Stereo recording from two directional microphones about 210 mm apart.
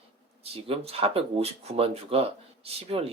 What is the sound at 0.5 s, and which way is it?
Speech, 25° right (ahead or behind).